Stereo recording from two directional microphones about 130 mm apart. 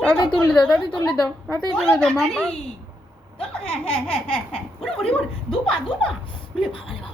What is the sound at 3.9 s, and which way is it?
Laughter, 45° left (ahead or behind).